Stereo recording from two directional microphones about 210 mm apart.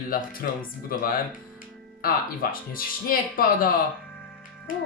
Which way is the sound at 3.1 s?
45° left (ahead or behind).